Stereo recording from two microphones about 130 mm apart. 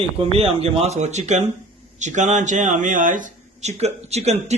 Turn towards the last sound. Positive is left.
turn(degrees=-55)  # may be behind; listen again after turning